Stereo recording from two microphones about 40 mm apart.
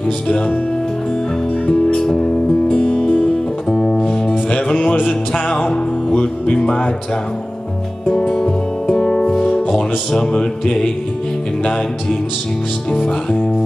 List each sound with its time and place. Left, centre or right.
1.7 s music: left
3.7 s music: centre
4.3 s music: left
8.1 s music: centre
13.0 s speech: left